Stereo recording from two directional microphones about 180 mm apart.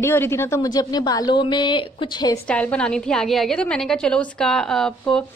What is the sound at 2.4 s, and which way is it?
A woman's voice, 5° left (ahead or behind).